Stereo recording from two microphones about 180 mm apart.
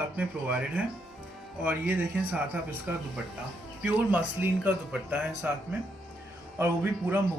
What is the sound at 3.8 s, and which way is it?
Speech, 5° right (ahead or behind).